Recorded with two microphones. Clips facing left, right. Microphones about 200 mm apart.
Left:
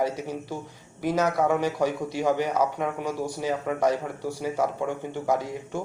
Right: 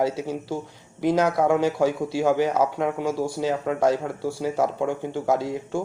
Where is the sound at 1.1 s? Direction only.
10° right (ahead or behind).